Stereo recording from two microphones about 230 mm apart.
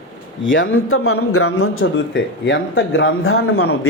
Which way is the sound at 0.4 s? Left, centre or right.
Left.